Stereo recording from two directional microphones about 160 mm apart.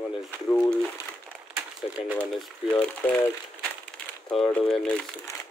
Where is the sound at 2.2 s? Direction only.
10° left (ahead or behind).